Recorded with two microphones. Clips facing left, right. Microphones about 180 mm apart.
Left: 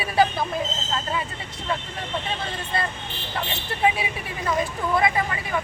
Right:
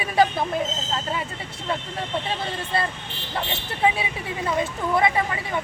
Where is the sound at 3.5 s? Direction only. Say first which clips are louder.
Even; 25° right (ahead or behind).